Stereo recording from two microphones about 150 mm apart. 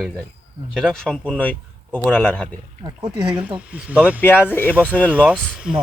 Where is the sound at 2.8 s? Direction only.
30° right (ahead or behind).